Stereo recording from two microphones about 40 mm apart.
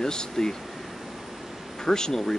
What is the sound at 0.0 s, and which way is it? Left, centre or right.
Speech, centre.